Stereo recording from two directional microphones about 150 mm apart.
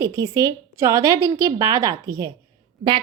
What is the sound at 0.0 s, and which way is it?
A woman's voice, 25° right (ahead or behind).